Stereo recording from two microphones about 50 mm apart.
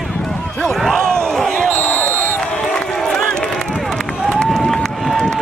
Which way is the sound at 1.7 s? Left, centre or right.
Left.